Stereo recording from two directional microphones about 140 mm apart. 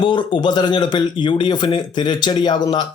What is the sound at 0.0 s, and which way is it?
Speech, 35° left (ahead or behind).